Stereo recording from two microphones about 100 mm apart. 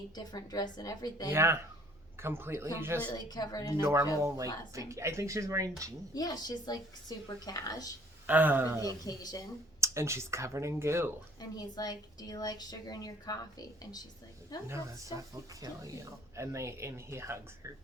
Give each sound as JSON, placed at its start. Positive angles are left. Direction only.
{"t": 0.2, "sound": "a woman's voice", "side_deg": 40}
{"t": 1.3, "sound": "speech", "side_deg": -25}
{"t": 3.1, "sound": "a woman's voice", "side_deg": 40}
{"t": 3.8, "sound": "speech", "side_deg": -30}
{"t": 6.1, "sound": "a woman's voice", "side_deg": 45}
{"t": 8.3, "sound": "speech", "side_deg": -20}
{"t": 9.0, "sound": "a woman's voice", "side_deg": 40}
{"t": 9.8, "sound": "speech", "side_deg": -30}
{"t": 11.3, "sound": "a woman's voice", "side_deg": 40}
{"t": 14.7, "sound": "speech", "side_deg": -30}